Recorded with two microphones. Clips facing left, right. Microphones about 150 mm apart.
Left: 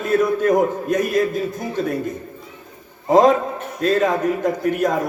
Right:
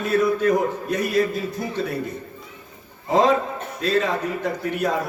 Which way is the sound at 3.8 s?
45° left (ahead or behind).